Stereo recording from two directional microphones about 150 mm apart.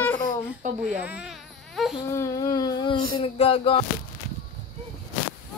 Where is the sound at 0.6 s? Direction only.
55° right (ahead or behind).